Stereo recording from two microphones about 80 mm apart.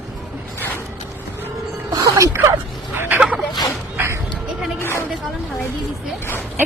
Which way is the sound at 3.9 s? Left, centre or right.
Right.